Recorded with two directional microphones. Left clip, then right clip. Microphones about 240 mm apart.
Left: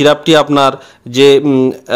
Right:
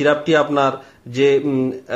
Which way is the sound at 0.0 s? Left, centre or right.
Left.